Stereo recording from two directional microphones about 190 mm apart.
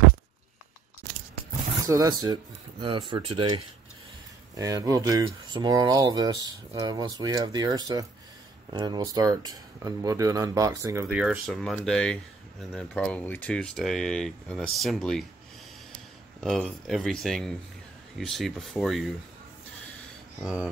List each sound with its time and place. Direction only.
1.9 s speech: 20° right (ahead or behind); by 15.2 s centre (ahead or behind)
16.3 s speech: 5° left (ahead or behind)